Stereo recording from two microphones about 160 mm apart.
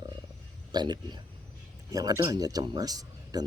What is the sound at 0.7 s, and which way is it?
Speech, 25° right (ahead or behind).